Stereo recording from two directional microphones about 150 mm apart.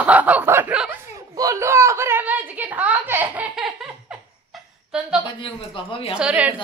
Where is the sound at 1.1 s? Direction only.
20° right (ahead or behind).